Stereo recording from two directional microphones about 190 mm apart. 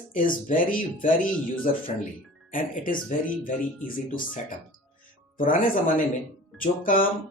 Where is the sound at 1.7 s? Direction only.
40° left (ahead or behind).